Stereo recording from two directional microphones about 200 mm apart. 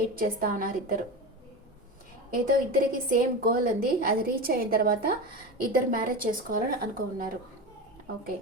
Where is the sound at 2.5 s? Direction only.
45° right (ahead or behind).